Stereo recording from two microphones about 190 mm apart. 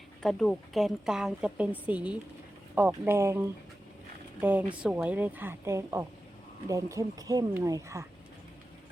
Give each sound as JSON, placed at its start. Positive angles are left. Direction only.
{"t": 0.2, "sound": "a woman's voice", "side_deg": 0}